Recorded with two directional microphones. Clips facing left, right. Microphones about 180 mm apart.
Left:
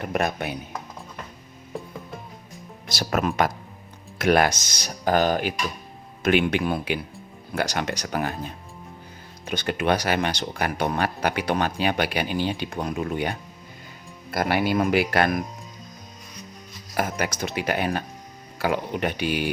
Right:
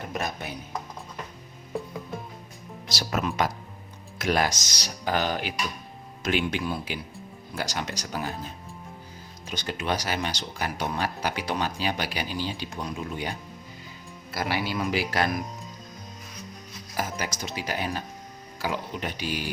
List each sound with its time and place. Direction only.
0.1 s speech: 65° left (ahead or behind)
2.8 s speech: 55° left (ahead or behind)
6.2 s speech: 60° left (ahead or behind)
9.5 s speech: 60° left (ahead or behind)
17.0 s speech: 60° left (ahead or behind)